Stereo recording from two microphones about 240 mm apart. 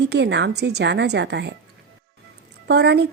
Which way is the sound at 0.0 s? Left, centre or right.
Right.